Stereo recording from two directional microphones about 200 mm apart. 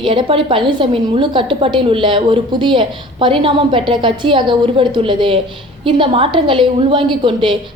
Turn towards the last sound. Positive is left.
turn(degrees=-25)  # may be behind; listen again after turning